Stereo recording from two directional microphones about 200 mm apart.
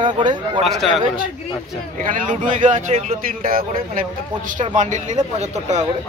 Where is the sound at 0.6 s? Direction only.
Centre (ahead or behind).